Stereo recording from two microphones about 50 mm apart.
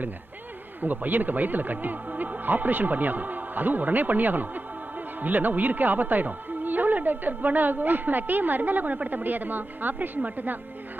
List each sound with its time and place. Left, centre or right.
0.8 s speech: right